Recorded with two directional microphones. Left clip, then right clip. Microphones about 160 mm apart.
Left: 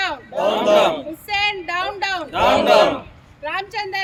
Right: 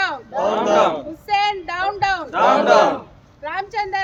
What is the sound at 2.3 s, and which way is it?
Speech, 15° left (ahead or behind).